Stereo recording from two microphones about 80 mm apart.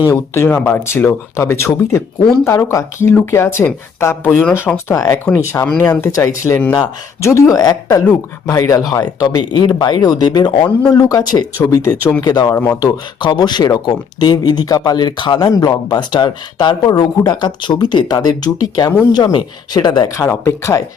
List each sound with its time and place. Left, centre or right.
0.1 s speech: left
8.9 s speech: left
11.6 s speech: left
12.2 s speech: left
13.1 s speech: left
19.1 s speech: left
20.2 s speech: left